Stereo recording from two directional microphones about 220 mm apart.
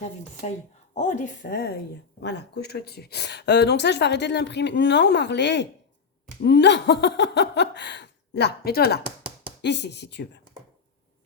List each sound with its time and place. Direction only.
0.9 s speech: 35° left (ahead or behind); by 10.4 s 50° left (ahead or behind)